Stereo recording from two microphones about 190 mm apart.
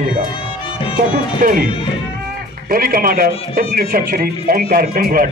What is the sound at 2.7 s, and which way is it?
Speech, 50° right (ahead or behind).